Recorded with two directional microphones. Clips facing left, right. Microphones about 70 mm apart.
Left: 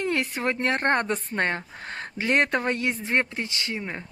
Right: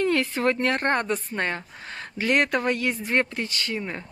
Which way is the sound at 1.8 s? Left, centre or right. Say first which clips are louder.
Left 2 dB; left.